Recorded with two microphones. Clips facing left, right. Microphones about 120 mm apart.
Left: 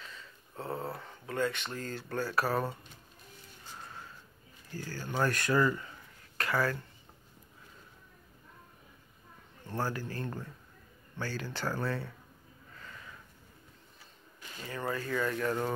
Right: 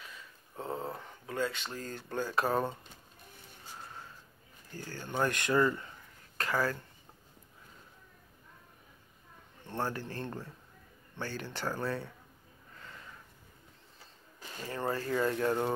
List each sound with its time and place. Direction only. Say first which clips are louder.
0.0 s speech: left 1 dB; 15° right (ahead or behind)
4.7 s speech: even; 25° right (ahead or behind)
6.5 s speech: left 1 dB; 15° right (ahead or behind)
9.8 s speech: left 1 dB; 25° right (ahead or behind)
14.6 s speech: right 1 dB; 30° right (ahead or behind)